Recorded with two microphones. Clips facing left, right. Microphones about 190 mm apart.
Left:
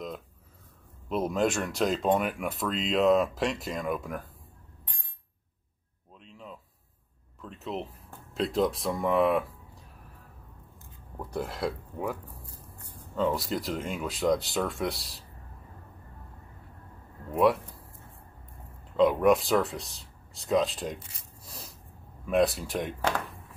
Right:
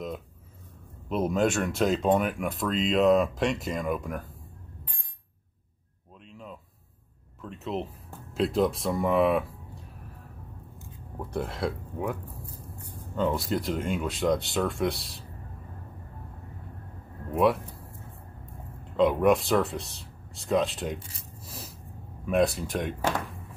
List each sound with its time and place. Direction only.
1.0 s speech: centre (ahead or behind)
6.2 s a sound: centre (ahead or behind)
7.4 s speech: centre (ahead or behind)
11.1 s speech: centre (ahead or behind)
17.3 s speech: centre (ahead or behind)
18.9 s speech: centre (ahead or behind)